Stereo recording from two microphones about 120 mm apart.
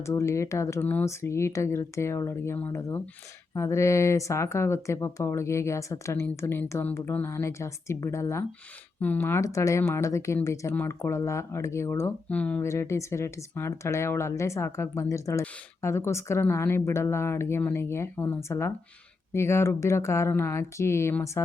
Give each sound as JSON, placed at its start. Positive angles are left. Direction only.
{"t": 0.0, "sound": "speech", "side_deg": 25}
{"t": 12.3, "sound": "speech", "side_deg": 10}
{"t": 12.6, "sound": "speech", "side_deg": 25}